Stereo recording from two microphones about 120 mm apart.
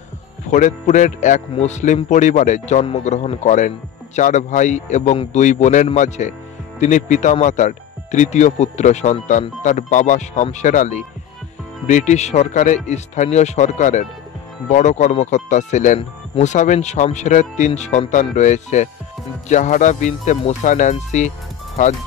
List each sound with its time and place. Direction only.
0.5 s speech: 85° left
16.0 s speech: 70° left (ahead or behind)
19.5 s speech: 90° left